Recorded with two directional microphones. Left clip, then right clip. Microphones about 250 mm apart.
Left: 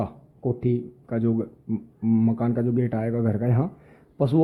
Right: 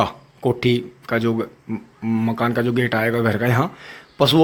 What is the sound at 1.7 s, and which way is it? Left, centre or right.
Speech, right.